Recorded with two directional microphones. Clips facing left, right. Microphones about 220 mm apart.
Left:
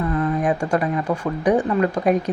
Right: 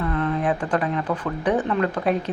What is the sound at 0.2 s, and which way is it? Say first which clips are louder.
Speech: left 2 dB; 10° left (ahead or behind).